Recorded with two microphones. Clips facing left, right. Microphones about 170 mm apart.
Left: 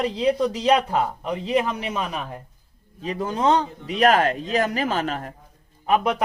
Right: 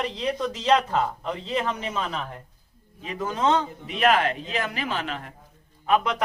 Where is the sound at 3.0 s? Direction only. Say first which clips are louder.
Left 3 dB; 35° left (ahead or behind).